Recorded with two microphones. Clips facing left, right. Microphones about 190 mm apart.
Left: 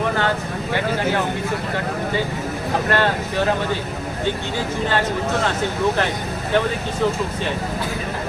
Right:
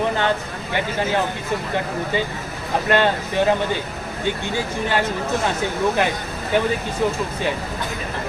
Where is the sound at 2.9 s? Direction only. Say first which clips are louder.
Right 3 dB; 15° right (ahead or behind).